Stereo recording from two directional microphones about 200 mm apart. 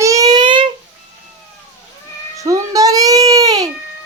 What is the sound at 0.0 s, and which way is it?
Child singing, 15° right (ahead or behind).